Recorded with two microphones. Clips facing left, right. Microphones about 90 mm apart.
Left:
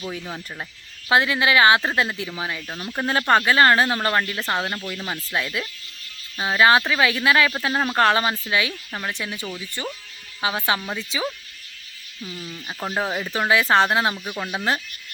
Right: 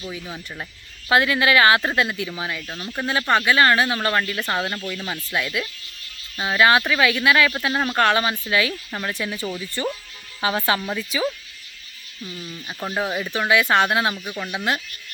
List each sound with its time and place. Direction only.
1.1 s speech: 25° left (ahead or behind)
2.6 s speech: 5° left (ahead or behind)
3.1 s speech: 35° left (ahead or behind); by 5.0 s 10° left (ahead or behind)
5.3 s speech: 30° left (ahead or behind)
7.7 s speech: 15° left (ahead or behind)
7.9 s speech: 25° left (ahead or behind)
8.9 s speech: 5° left (ahead or behind)
9.1 s speech: 15° left (ahead or behind)
13.5 s speech: 30° left (ahead or behind)